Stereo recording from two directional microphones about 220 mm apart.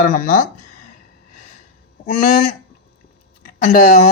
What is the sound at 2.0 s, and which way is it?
Speech, 35° left (ahead or behind).